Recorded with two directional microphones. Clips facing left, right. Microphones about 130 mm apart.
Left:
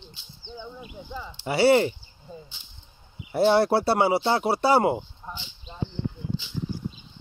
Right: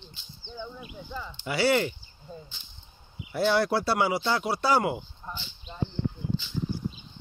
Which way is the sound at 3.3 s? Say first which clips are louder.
Left 5 dB; 25° left (ahead or behind).